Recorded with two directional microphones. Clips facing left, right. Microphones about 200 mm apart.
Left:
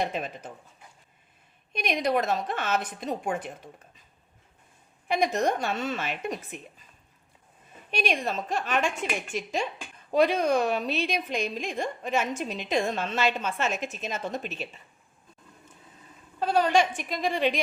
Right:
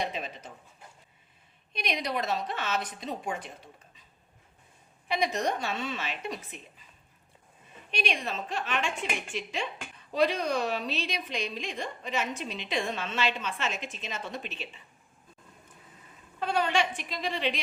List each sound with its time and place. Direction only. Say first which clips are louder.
0.0 s a woman's voice: left 4 dB; 50° left (ahead or behind)
1.7 s a woman's voice: left 6 dB; 50° left (ahead or behind)
5.0 s a woman's voice: left 4 dB; 50° left (ahead or behind)
7.9 s a woman's voice: left 4 dB; 45° left (ahead or behind)
16.4 s a woman's voice: left 5 dB; 40° left (ahead or behind)